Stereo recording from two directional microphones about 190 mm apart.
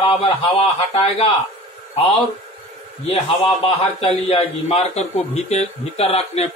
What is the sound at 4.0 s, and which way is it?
Speech, 30° left (ahead or behind).